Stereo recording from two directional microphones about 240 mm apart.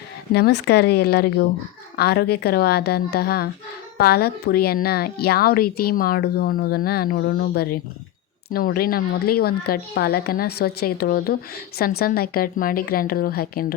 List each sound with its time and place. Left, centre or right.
0.3 s a woman's voice: left